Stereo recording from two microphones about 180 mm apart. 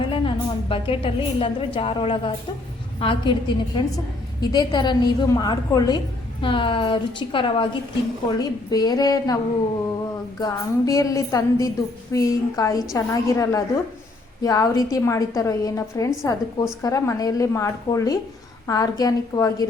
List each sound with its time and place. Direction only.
0.0 s a woman's voice: 30° left (ahead or behind)
10.4 s a woman's voice: 20° left (ahead or behind)